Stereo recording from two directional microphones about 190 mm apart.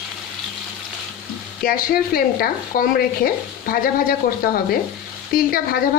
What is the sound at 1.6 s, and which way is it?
Speech, 50° left (ahead or behind).